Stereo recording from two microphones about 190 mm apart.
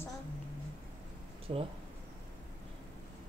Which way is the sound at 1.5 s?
30° right (ahead or behind).